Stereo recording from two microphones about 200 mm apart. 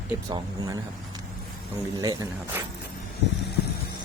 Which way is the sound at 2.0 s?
15° right (ahead or behind).